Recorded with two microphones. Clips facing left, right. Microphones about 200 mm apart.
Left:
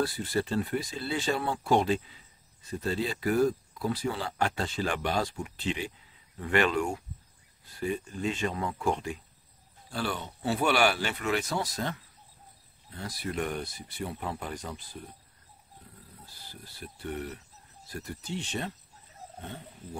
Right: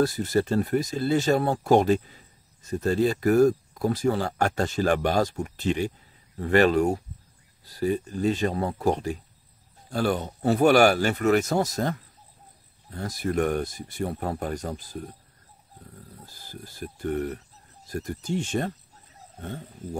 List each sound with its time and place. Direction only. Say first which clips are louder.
0.0 s speech: right 6 dB; 45° right (ahead or behind)
16.3 s speech: right 7 dB; 45° right (ahead or behind)